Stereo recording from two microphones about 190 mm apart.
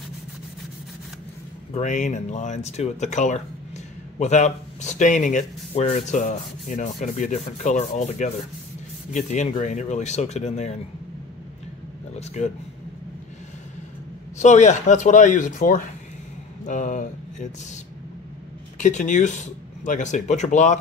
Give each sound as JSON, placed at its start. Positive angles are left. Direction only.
{"t": 1.7, "sound": "speech", "side_deg": 40}
{"t": 12.4, "sound": "speech", "side_deg": 35}
{"t": 14.4, "sound": "speech", "side_deg": 40}
{"t": 18.8, "sound": "speech", "side_deg": 40}